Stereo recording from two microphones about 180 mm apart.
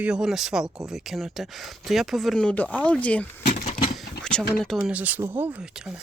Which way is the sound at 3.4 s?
40° left (ahead or behind).